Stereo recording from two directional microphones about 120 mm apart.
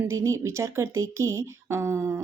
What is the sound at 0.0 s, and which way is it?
Speech, 25° right (ahead or behind).